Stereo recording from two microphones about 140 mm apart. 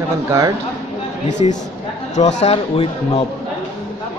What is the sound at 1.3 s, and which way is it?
A man's voice, 60° left (ahead or behind).